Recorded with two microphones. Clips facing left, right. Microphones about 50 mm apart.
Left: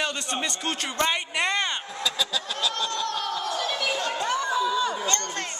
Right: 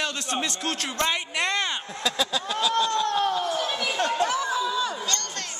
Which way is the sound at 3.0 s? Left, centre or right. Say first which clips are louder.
Right 4 dB; right.